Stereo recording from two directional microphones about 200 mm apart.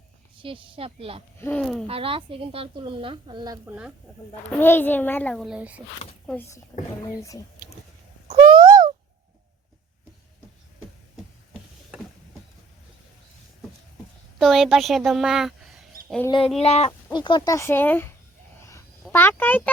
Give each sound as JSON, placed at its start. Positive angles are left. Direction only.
{"t": 0.3, "sound": "a woman's voice", "side_deg": -25}
{"t": 1.4, "sound": "a woman's voice", "side_deg": 10}
{"t": 1.9, "sound": "a woman's voice", "side_deg": -25}
{"t": 4.6, "sound": "a child's voice", "side_deg": 10}
{"t": 6.2, "sound": "a child's voice", "side_deg": 10}
{"t": 8.3, "sound": "a sound", "side_deg": -30}
{"t": 11.9, "sound": "vehicle", "side_deg": -5}
{"t": 14.3, "sound": "a woman's voice", "side_deg": 0}
{"t": 16.2, "sound": "a child's voice", "side_deg": 25}